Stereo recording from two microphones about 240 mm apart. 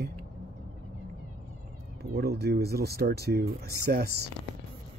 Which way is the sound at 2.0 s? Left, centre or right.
Right.